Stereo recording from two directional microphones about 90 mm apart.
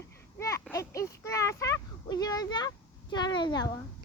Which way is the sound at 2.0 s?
45° left (ahead or behind).